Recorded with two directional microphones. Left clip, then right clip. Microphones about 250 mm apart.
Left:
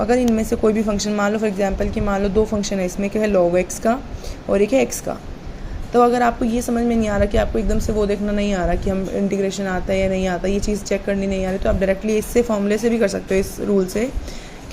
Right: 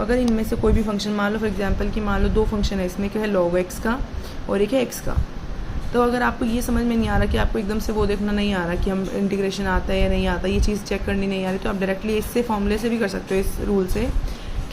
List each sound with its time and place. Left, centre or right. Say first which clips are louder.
0.0 s a woman's voice: left 4 dB; centre